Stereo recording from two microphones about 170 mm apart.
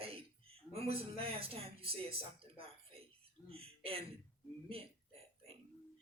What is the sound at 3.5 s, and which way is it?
Speech, 35° right (ahead or behind).